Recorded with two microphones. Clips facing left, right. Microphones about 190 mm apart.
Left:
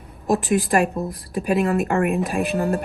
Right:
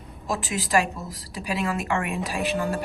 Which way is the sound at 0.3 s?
55° left (ahead or behind).